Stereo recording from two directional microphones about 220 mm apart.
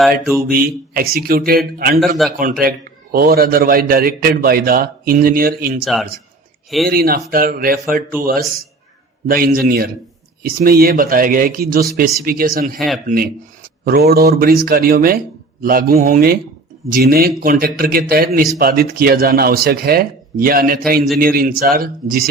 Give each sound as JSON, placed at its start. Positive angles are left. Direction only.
{"t": 0.5, "sound": "speech", "side_deg": -40}
{"t": 2.0, "sound": "a man's voice", "side_deg": 0}
{"t": 2.4, "sound": "a man's voice", "side_deg": -40}
{"t": 5.8, "sound": "a man's voice", "side_deg": 0}
{"t": 6.8, "sound": "a man's voice", "side_deg": -40}